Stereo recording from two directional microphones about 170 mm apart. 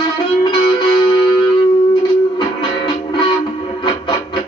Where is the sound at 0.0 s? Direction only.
30° left (ahead or behind).